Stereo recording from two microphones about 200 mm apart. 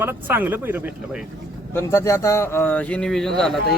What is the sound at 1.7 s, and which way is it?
A man's voice, 15° left (ahead or behind).